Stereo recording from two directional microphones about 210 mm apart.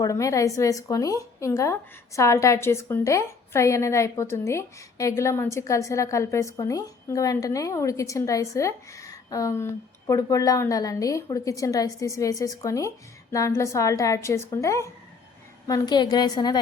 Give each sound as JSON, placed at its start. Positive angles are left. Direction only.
{"t": 0.0, "sound": "a woman's voice", "side_deg": 15}